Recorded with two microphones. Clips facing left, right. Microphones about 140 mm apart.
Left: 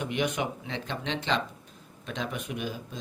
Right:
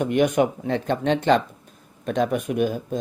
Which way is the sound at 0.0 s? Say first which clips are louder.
Right 10 dB; 50° right (ahead or behind).